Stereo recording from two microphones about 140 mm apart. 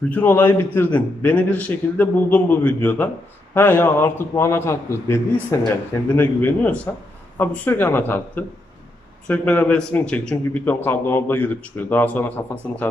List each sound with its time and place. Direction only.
0.1 s a man's voice: 15° left (ahead or behind)